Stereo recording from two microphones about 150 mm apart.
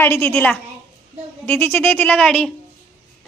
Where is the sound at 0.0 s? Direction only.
15° left (ahead or behind).